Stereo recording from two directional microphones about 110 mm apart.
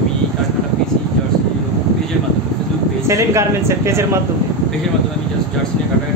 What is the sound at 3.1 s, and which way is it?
Speech, 25° right (ahead or behind).